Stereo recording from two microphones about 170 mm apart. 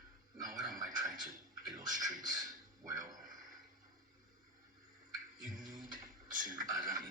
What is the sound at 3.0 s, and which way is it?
Speech, 50° right (ahead or behind).